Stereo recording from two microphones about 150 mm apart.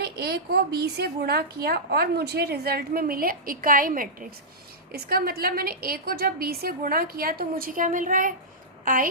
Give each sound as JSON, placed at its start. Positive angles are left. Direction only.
{"t": 0.0, "sound": "a woman's voice", "side_deg": -90}
{"t": 4.9, "sound": "a woman's voice", "side_deg": -90}